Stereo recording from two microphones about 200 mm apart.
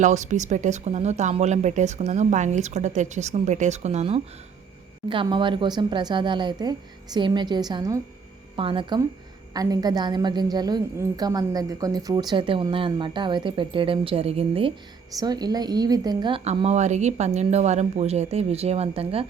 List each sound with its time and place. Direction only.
0.0 s a woman's voice: 35° right (ahead or behind)